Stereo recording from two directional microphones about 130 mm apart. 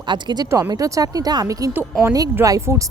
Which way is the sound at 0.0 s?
35° right (ahead or behind).